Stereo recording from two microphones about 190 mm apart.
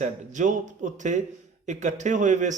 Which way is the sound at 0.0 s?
40° right (ahead or behind).